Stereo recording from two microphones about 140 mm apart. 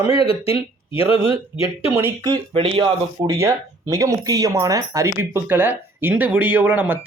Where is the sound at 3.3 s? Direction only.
20° right (ahead or behind).